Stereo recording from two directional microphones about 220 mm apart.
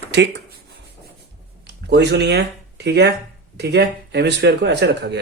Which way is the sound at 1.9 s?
50° right (ahead or behind).